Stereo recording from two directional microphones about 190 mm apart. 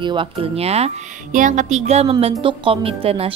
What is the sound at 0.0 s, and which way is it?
A woman's voice, 25° right (ahead or behind).